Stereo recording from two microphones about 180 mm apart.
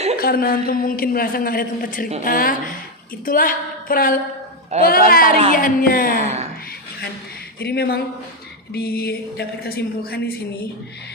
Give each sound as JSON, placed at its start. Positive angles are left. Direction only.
{"t": 0.2, "sound": "a woman's voice", "side_deg": 55}
{"t": 6.2, "sound": "speech", "side_deg": -40}
{"t": 7.6, "sound": "a woman's voice", "side_deg": 60}